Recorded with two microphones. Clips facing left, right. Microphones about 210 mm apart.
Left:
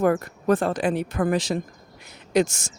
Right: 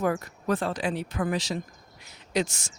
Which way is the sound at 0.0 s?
55° left (ahead or behind).